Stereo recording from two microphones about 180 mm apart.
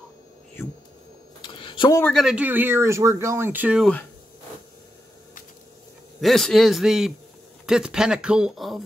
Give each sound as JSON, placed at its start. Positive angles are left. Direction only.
{"t": 1.4, "sound": "a sound", "side_deg": 25}
{"t": 2.1, "sound": "speech", "side_deg": -5}
{"t": 6.2, "sound": "speech", "side_deg": 0}